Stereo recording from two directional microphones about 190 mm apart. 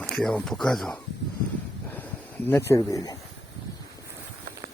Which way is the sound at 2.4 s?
15° left (ahead or behind).